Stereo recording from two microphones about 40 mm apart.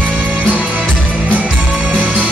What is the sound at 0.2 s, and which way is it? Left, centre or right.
Music, right.